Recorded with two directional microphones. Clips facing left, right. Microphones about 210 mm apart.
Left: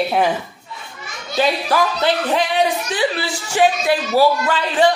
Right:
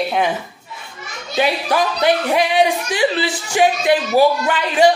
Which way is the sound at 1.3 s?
15° right (ahead or behind).